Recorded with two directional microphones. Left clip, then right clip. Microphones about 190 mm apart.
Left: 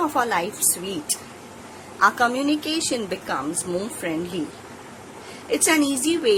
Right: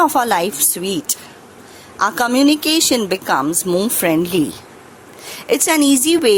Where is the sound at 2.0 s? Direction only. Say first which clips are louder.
Right 4 dB; 50° right (ahead or behind).